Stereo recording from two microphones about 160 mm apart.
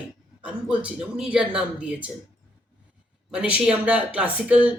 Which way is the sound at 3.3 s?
5° right (ahead or behind).